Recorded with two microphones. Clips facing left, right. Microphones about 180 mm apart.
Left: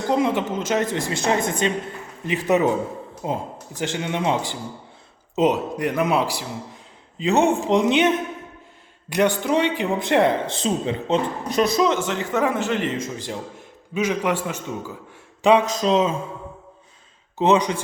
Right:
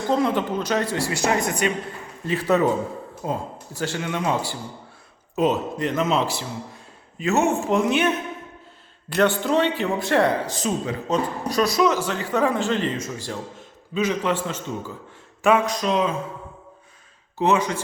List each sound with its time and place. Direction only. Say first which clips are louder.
0.1 s a man's voice: even; 15° left (ahead or behind)
15.4 s a man's voice: left 3 dB; 20° left (ahead or behind)
17.3 s speech: left 2 dB; 20° left (ahead or behind)